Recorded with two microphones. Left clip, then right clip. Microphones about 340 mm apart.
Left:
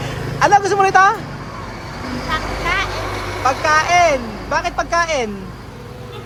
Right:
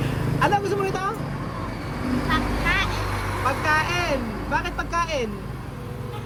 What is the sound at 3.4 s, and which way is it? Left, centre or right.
Speech, centre.